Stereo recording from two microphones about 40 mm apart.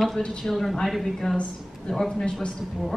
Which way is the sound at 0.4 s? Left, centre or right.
Centre.